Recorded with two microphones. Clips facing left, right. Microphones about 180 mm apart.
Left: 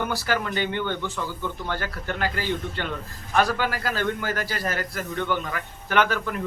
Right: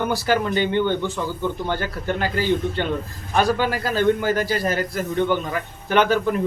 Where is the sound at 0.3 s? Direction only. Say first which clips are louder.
Right 7 dB; 25° right (ahead or behind).